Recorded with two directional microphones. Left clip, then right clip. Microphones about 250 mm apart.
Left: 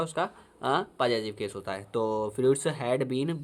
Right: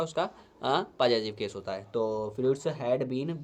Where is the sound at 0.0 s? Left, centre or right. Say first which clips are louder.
Even; left.